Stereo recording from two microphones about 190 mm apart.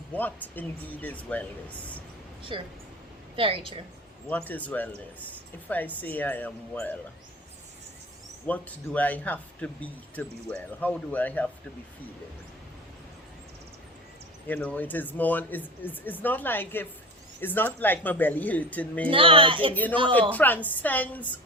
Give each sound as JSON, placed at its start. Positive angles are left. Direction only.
{"t": 0.1, "sound": "speech", "side_deg": 10}
{"t": 2.5, "sound": "a woman's voice", "side_deg": -25}
{"t": 4.3, "sound": "speech", "side_deg": 10}
{"t": 8.4, "sound": "speech", "side_deg": 10}
{"t": 14.4, "sound": "speech", "side_deg": 10}
{"t": 19.1, "sound": "a woman's voice", "side_deg": -30}
{"t": 19.7, "sound": "speech", "side_deg": 10}